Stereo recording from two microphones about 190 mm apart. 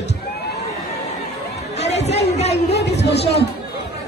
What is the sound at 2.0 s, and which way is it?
Chatter, 35° left (ahead or behind).